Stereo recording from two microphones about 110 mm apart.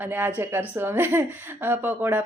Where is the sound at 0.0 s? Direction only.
15° right (ahead or behind).